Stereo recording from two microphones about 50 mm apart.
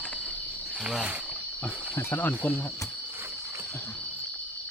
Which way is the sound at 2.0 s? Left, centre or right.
Left.